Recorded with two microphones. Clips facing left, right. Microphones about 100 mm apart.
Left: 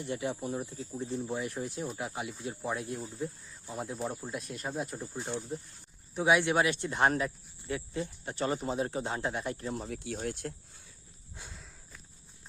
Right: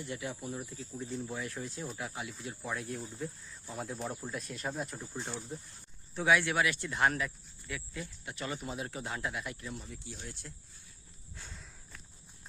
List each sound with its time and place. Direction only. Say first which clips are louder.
0.0 s speech: left 5 dB; 25° left (ahead or behind)
2.9 s speech: left 3 dB; 5° left (ahead or behind)
6.1 s speech: left 3 dB; 20° left (ahead or behind); by 9.9 s 40° left (ahead or behind)
9.9 s speech: left 10 dB; 65° left (ahead or behind)
11.5 s walk: left 1 dB; centre (ahead or behind)